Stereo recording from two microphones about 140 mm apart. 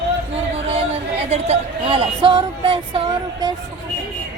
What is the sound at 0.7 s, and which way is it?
Speech, 45° right (ahead or behind).